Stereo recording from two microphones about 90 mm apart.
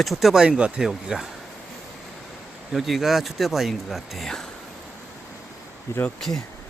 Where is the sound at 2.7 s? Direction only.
Centre (ahead or behind).